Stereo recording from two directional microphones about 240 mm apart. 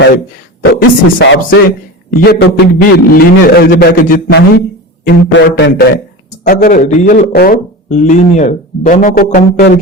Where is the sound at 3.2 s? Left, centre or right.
Left.